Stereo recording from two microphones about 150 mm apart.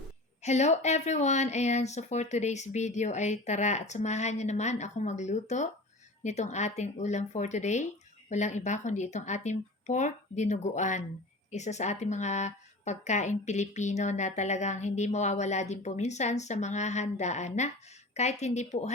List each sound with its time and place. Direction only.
0.4 s a woman's voice: 50° left (ahead or behind)